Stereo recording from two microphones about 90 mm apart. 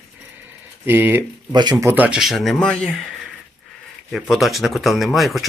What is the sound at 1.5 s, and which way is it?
Speech, 50° right (ahead or behind).